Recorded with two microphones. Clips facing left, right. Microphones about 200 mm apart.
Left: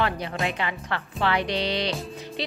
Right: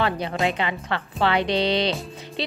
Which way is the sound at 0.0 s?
25° right (ahead or behind).